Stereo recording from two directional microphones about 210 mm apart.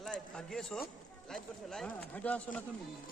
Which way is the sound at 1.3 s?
5° left (ahead or behind).